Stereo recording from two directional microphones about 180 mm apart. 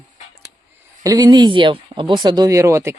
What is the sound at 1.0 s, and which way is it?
Speech, 20° right (ahead or behind).